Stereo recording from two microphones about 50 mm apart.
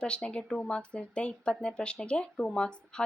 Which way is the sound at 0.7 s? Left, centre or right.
Centre.